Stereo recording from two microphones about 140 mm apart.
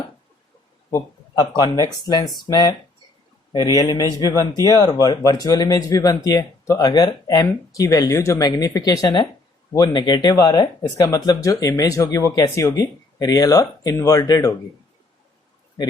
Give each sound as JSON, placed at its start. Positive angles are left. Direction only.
{"t": 0.9, "sound": "speech", "side_deg": 25}